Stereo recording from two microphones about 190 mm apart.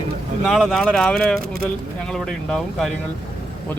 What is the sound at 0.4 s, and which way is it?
Speech, centre (ahead or behind).